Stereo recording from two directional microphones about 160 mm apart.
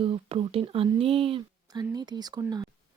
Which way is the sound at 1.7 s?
25° right (ahead or behind).